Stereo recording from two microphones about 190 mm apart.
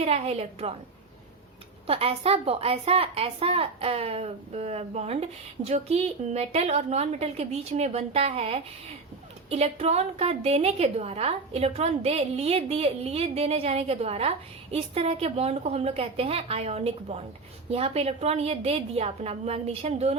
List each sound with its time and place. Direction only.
0.0 s a woman's voice: 35° right (ahead or behind)
1.9 s a woman's voice: 30° right (ahead or behind)